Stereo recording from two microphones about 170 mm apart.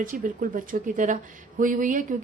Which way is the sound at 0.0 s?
55° right (ahead or behind).